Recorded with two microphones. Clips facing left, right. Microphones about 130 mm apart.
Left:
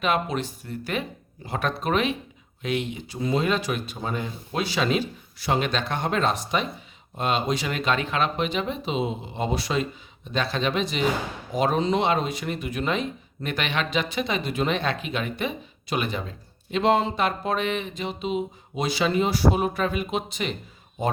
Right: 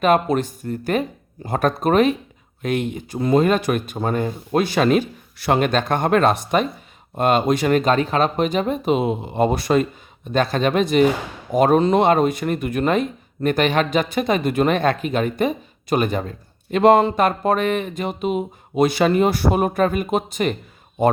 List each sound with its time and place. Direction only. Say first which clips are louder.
0.0 s speech: right 8 dB; 45° right (ahead or behind)